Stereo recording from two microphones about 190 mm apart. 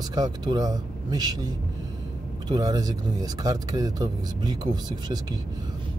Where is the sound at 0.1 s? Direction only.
20° right (ahead or behind).